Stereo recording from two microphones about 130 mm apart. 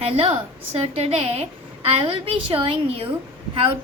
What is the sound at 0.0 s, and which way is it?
A woman's voice, 50° right (ahead or behind).